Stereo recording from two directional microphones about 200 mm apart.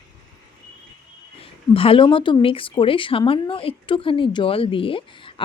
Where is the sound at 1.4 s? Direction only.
25° left (ahead or behind).